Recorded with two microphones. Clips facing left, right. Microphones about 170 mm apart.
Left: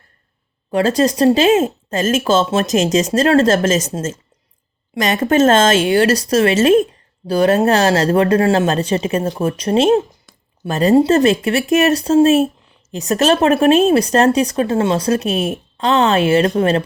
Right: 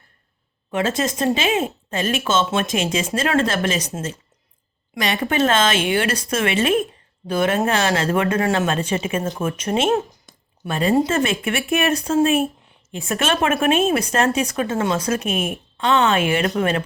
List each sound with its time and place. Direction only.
0.7 s speech: 35° left (ahead or behind)
4.9 s speech: 45° left (ahead or behind)